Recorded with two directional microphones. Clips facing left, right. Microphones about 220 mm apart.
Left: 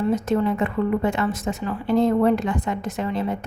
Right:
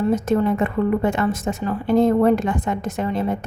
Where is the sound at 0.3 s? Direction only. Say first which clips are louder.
Right 2 dB; 45° right (ahead or behind).